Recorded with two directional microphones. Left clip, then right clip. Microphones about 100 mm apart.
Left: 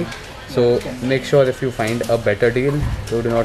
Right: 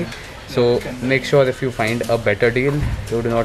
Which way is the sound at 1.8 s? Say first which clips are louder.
Even; 15° left (ahead or behind).